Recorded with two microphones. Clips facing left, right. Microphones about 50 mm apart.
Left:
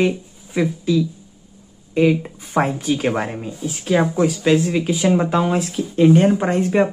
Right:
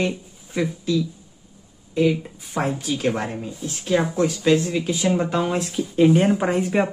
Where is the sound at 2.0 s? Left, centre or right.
Left.